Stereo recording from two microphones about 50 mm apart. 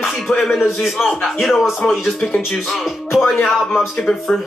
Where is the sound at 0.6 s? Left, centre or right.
Centre.